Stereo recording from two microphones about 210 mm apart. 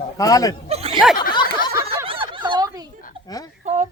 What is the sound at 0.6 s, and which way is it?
Speech, 30° right (ahead or behind).